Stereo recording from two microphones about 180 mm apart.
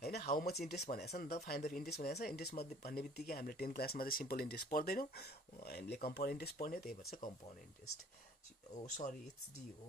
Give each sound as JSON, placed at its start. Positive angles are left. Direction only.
{"t": 0.0, "sound": "speech", "side_deg": 60}